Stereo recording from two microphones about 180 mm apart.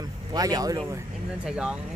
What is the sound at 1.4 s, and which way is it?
Speech, 5° right (ahead or behind).